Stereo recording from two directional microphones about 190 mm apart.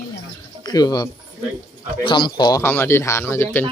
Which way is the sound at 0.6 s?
20° left (ahead or behind).